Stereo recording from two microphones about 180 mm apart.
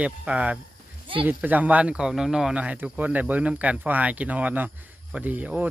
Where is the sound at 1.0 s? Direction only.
30° right (ahead or behind).